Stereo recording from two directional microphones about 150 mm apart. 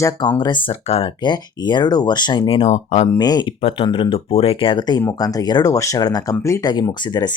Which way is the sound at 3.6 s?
40° left (ahead or behind).